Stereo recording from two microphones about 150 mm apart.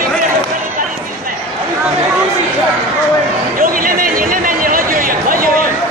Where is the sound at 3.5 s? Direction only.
70° right (ahead or behind).